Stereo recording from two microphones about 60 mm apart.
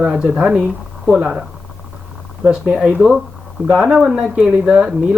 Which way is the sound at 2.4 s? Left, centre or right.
Right.